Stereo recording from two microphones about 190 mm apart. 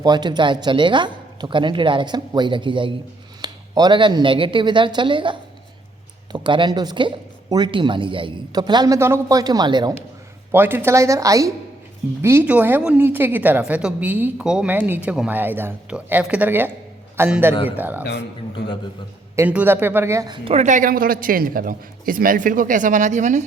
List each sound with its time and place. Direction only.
0.0 s speech: 20° right (ahead or behind)
10.5 s a woman's voice: 10° right (ahead or behind)
18.0 s speech: 65° left (ahead or behind)
19.4 s a woman's voice: 10° right (ahead or behind); by 23.5 s 40° right (ahead or behind)